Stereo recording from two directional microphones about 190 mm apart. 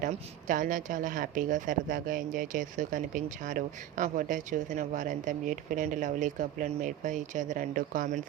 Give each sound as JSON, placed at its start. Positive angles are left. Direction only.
{"t": 0.0, "sound": "speech", "side_deg": -45}